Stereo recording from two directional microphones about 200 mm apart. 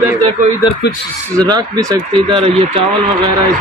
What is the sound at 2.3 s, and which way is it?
Speech, 30° right (ahead or behind).